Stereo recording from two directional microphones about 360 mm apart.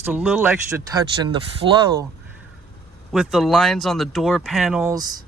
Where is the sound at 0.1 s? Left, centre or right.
Centre.